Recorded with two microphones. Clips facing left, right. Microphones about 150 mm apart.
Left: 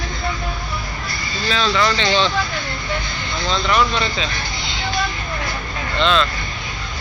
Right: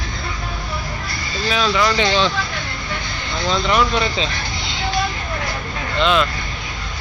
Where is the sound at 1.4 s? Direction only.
10° right (ahead or behind).